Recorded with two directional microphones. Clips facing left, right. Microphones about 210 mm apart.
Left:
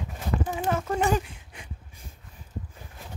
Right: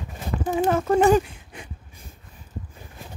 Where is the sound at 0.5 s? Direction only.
50° right (ahead or behind).